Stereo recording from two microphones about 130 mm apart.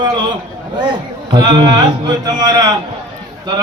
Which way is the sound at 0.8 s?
35° right (ahead or behind).